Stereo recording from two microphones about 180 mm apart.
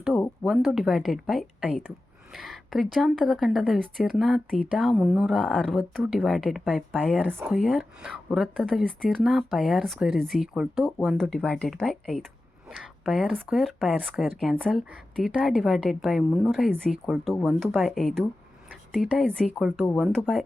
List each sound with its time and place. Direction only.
0.4 s speech: centre (ahead or behind)